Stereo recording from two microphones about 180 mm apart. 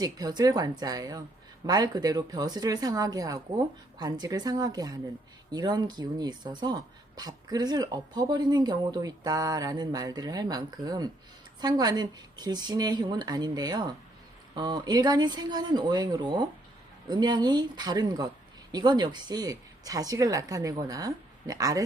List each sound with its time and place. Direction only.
0.0 s speech: 20° right (ahead or behind)